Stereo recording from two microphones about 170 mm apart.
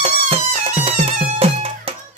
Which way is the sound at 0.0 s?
40° right (ahead or behind).